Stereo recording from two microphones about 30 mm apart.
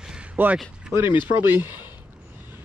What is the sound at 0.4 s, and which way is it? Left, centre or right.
Speech, right.